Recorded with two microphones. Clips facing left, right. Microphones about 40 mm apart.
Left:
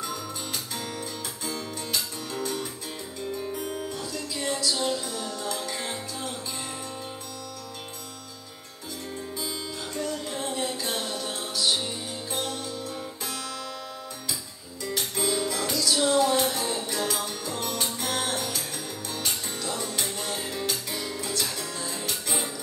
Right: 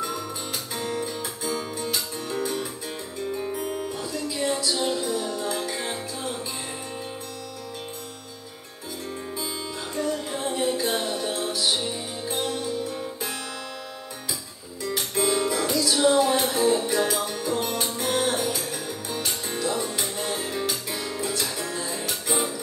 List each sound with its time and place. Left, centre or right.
0.7 s music: centre
9.9 s music: centre
14.8 s music: centre